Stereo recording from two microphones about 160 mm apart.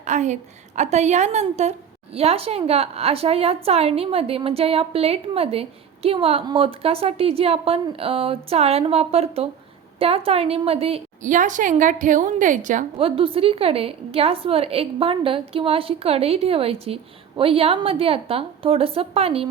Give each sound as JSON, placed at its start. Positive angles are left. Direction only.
{"t": 0.0, "sound": "a woman's voice", "side_deg": -50}
{"t": 11.3, "sound": "a woman's voice", "side_deg": -50}
{"t": 13.0, "sound": "a woman's voice", "side_deg": -35}